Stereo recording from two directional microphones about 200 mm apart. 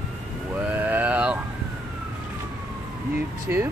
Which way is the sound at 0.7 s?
10° right (ahead or behind).